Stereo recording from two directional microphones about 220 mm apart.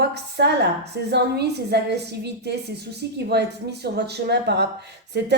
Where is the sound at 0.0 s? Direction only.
50° right (ahead or behind).